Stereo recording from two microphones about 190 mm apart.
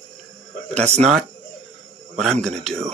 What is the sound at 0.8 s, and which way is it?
Speech, 35° right (ahead or behind).